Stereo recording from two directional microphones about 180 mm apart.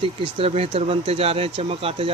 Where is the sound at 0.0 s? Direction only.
30° right (ahead or behind).